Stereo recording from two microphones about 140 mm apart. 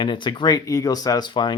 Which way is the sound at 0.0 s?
35° left (ahead or behind).